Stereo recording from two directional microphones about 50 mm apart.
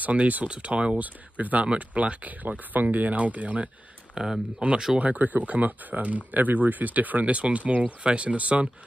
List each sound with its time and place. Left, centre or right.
0.0 s speech: right
4.1 s speech: centre
4.6 s speech: right